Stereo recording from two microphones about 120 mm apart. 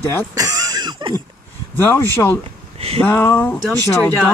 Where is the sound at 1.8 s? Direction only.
20° left (ahead or behind).